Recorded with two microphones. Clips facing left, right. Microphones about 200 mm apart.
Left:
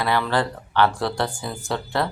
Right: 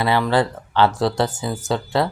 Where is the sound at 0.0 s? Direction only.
15° right (ahead or behind).